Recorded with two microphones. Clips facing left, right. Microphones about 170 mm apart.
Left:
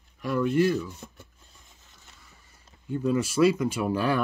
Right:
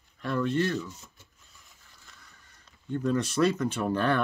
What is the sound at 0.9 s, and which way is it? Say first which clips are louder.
Speech: left 9 dB; 60° left (ahead or behind).